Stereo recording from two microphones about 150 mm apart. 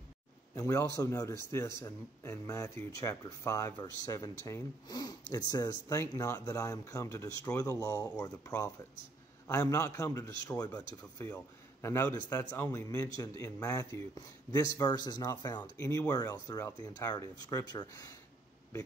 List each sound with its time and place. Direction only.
0.6 s speech: 20° left (ahead or behind)
9.5 s a man's voice: 20° left (ahead or behind)
11.2 s a man's voice: 10° left (ahead or behind)
11.9 s a man's voice: 20° left (ahead or behind)